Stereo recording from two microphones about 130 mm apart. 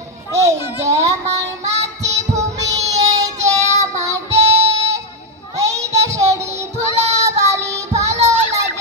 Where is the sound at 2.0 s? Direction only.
25° right (ahead or behind).